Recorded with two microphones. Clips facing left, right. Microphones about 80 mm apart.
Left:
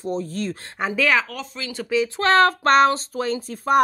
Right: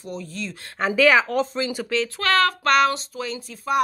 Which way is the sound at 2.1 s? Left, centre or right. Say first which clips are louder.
Left 4 dB; left.